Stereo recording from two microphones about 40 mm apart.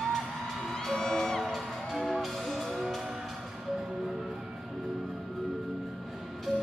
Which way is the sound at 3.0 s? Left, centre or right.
Centre.